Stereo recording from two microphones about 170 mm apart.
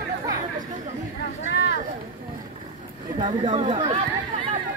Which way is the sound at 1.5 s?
70° left (ahead or behind).